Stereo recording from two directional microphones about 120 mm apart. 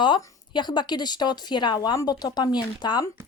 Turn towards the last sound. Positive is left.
turn(degrees=35)  # may be behind; listen again after turning